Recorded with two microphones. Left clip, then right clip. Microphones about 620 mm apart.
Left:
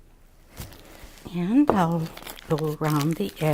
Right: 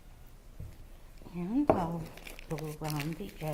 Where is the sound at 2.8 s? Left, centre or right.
Left.